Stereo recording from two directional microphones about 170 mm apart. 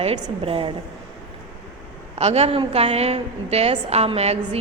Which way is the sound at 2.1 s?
40° right (ahead or behind).